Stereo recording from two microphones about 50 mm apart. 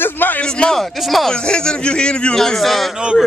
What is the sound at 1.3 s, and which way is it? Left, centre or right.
Speech, centre.